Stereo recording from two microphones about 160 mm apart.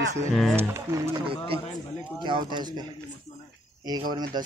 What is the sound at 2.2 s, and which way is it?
Speech, 30° right (ahead or behind).